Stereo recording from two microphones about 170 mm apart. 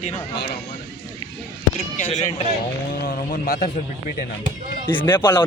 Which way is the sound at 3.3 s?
55° left (ahead or behind).